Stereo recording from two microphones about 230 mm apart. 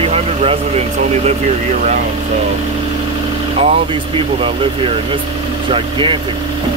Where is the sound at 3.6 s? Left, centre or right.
Right.